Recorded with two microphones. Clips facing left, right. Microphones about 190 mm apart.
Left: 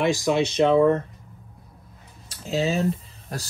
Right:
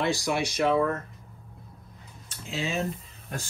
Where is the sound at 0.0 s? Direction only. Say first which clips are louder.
Left 6 dB; 15° left (ahead or behind).